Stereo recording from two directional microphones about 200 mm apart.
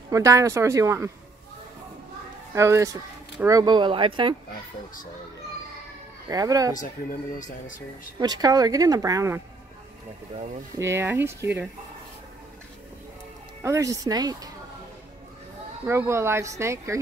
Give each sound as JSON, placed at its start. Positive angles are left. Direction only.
{"t": 0.1, "sound": "speech", "side_deg": -15}
{"t": 2.5, "sound": "speech", "side_deg": -15}
{"t": 6.3, "sound": "speech", "side_deg": -15}
{"t": 6.8, "sound": "speech", "side_deg": 40}
{"t": 8.2, "sound": "speech", "side_deg": -20}
{"t": 10.8, "sound": "speech", "side_deg": -15}
{"t": 13.6, "sound": "speech", "side_deg": -15}
{"t": 15.9, "sound": "speech", "side_deg": -15}